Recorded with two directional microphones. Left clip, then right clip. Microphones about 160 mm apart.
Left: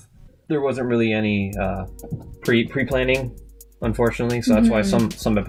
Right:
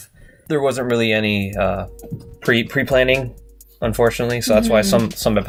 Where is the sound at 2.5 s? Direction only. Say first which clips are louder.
Right 4 dB; 25° right (ahead or behind).